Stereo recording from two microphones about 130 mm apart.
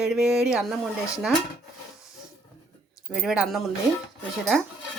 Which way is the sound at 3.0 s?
5° right (ahead or behind).